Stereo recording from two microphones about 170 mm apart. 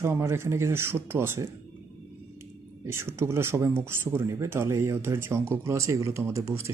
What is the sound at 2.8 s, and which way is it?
Speech, 15° right (ahead or behind).